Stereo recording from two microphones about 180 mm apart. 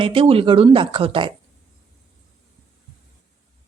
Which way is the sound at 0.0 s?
30° right (ahead or behind).